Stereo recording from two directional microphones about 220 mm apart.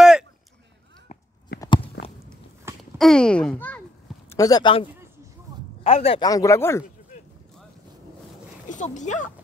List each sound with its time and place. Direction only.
1.1 s a sound: 30° left (ahead or behind)
1.6 s biting: 25° left (ahead or behind)
2.8 s speech: centre (ahead or behind); by 4.8 s 20° left (ahead or behind)
5.5 s a sound: 15° right (ahead or behind)
5.9 s speech: 25° left (ahead or behind)
8.6 s speech: 35° left (ahead or behind)